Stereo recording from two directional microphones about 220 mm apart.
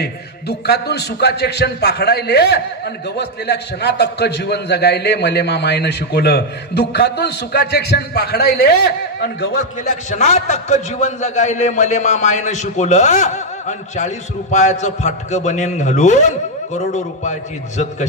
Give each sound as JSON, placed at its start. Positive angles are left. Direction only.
{"t": 0.0, "sound": "a man's voice", "side_deg": 50}
{"t": 10.0, "sound": "a man's voice", "side_deg": 35}